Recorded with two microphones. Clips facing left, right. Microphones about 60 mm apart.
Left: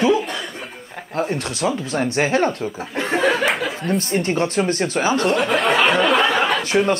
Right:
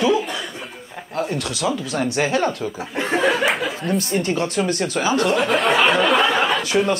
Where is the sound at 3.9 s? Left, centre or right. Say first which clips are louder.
Left 2 dB; left.